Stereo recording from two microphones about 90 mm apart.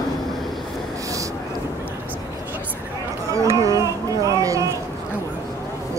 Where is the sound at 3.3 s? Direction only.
35° right (ahead or behind).